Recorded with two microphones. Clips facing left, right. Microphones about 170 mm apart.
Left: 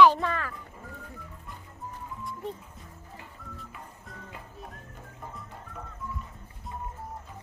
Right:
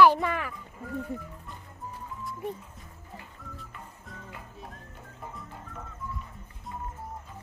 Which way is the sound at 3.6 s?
Centre (ahead or behind).